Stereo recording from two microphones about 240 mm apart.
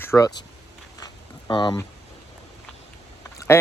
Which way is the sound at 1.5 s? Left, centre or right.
Centre.